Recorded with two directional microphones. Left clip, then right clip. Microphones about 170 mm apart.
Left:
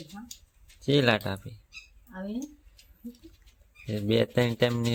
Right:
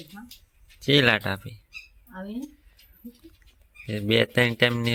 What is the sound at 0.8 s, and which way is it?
Speech, 5° right (ahead or behind).